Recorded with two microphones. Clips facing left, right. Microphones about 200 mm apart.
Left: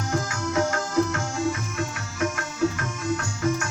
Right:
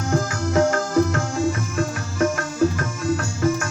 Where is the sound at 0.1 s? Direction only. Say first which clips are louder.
Right 6 dB; 50° right (ahead or behind).